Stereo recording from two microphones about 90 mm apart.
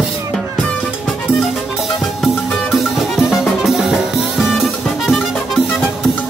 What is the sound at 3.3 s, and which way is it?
Music, 5° right (ahead or behind).